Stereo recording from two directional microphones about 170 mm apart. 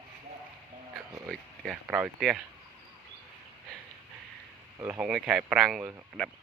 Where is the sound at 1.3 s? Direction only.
Centre (ahead or behind).